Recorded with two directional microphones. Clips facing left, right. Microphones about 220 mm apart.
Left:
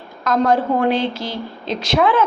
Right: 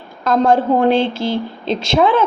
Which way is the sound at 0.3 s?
25° right (ahead or behind).